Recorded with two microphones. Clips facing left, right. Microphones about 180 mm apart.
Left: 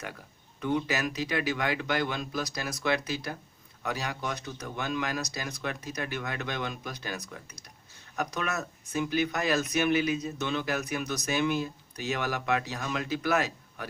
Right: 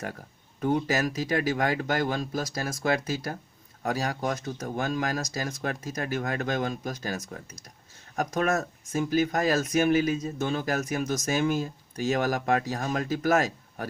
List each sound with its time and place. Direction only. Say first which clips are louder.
0.6 s speech: right 4 dB; 45° right (ahead or behind)